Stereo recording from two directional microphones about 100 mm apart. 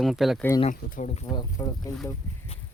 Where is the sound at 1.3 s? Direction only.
45° left (ahead or behind).